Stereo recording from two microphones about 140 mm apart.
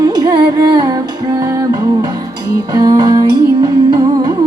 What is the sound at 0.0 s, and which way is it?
Music, 30° right (ahead or behind).